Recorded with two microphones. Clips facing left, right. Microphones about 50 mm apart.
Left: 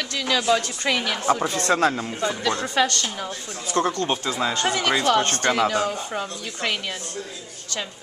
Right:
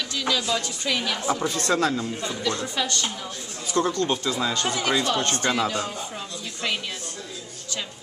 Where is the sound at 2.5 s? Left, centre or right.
Left.